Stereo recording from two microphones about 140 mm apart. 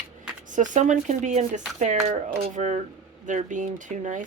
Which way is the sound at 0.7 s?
60° right (ahead or behind).